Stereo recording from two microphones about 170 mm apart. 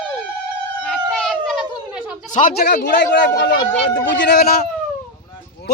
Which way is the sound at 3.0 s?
85° left.